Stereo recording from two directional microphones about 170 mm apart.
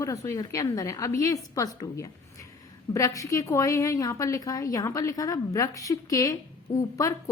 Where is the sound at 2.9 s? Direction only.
20° left (ahead or behind).